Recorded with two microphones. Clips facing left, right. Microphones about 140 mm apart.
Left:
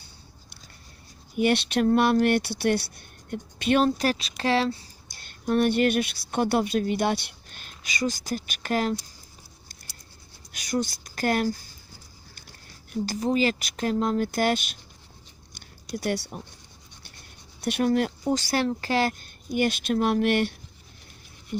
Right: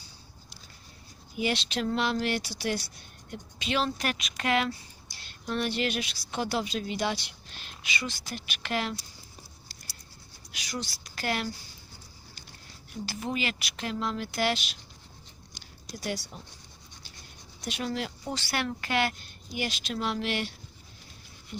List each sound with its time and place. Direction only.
1.4 s speech: 55° left (ahead or behind)
3.8 s speech: 35° left (ahead or behind)
5.0 s a woman's voice: 50° left (ahead or behind)
10.5 s speech: 50° left (ahead or behind)
13.1 s speech: 35° left (ahead or behind)
15.5 s a sound: 60° left (ahead or behind)
17.6 s speech: 60° left (ahead or behind)
18.3 s speech: 40° left (ahead or behind); by 20.5 s 55° left (ahead or behind)